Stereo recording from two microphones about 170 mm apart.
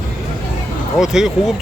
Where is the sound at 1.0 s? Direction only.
5° right (ahead or behind).